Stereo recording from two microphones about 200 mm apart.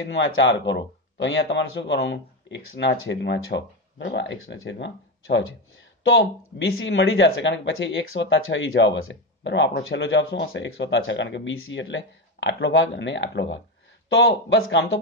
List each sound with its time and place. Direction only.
0.1 s speech: 65° left (ahead or behind)
6.7 s speech: 75° left (ahead or behind)